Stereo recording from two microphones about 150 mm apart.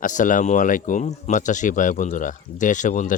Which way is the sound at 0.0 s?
60° left (ahead or behind).